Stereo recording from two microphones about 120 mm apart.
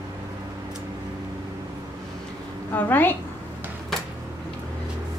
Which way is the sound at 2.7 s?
15° left (ahead or behind).